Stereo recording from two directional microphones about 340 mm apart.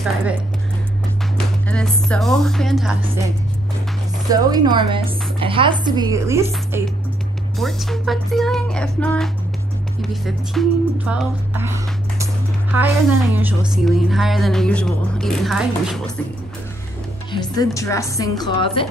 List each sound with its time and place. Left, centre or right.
1.7 s a woman's voice: centre
4.3 s a woman's voice: centre
17.3 s speech: centre